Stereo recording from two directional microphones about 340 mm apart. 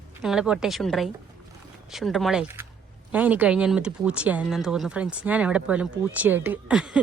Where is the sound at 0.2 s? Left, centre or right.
Centre.